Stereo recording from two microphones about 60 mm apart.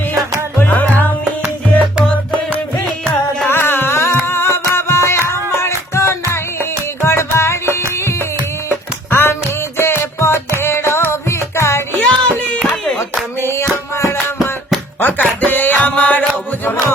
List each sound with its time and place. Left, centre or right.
0.6 s music: left
1.4 s music: centre
3.5 s music: left
11.9 s a sound: centre
13.5 s music: left
15.0 s music: left